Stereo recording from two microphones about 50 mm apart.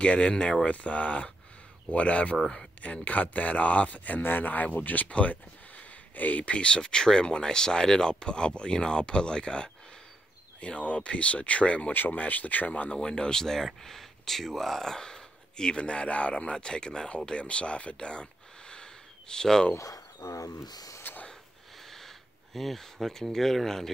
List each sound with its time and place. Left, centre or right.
0.0 s speech: left
11.9 s speech: left
12.9 s speech: centre
19.8 s speech: left
21.0 s snort: left
21.9 s speech: centre